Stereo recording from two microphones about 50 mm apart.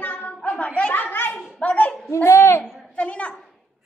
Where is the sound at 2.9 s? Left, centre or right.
Left.